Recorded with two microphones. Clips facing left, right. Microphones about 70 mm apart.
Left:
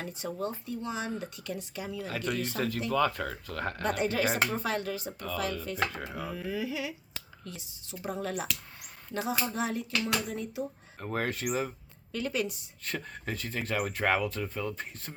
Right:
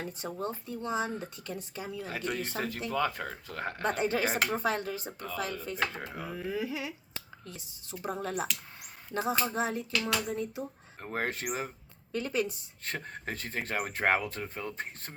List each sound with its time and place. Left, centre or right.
0.0 s speech: right